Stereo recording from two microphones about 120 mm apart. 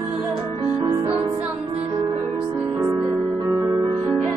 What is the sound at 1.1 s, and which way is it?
Music, 50° right (ahead or behind).